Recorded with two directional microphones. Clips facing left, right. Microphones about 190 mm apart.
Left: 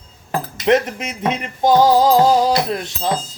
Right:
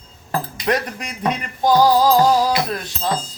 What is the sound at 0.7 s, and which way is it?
Speech, 25° left (ahead or behind).